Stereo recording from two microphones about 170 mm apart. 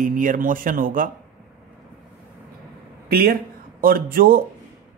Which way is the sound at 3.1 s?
65° right (ahead or behind).